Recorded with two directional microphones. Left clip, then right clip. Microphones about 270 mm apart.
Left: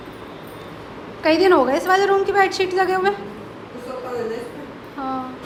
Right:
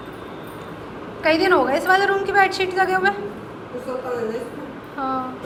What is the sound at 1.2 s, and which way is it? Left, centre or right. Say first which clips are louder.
A woman's voice: left 2 dB; left.